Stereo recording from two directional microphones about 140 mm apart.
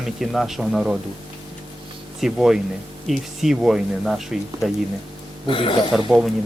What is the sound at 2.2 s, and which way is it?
Speech, 5° right (ahead or behind).